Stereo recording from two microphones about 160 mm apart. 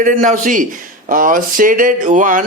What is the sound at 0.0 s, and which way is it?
Speech, 55° right (ahead or behind).